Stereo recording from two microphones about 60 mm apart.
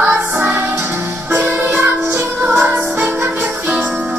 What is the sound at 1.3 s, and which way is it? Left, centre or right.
Music, right.